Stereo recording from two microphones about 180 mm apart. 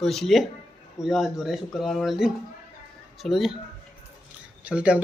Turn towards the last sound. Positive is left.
turn(degrees=-5)  # may be behind; listen again after turning